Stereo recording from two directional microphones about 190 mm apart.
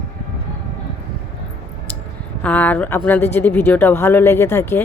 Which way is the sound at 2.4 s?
5° left (ahead or behind).